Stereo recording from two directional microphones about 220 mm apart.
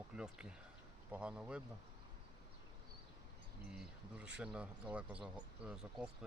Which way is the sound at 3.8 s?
5° right (ahead or behind).